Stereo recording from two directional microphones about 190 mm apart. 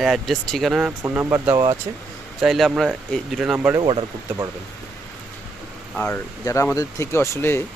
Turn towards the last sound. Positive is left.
turn(degrees=15)  # may be behind; listen again after turning